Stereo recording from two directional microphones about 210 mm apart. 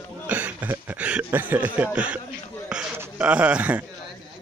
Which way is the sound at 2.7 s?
5° right (ahead or behind).